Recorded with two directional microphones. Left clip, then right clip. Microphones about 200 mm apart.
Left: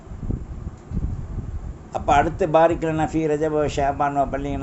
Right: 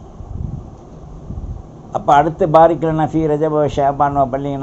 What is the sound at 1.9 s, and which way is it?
A man's voice, 10° left (ahead or behind).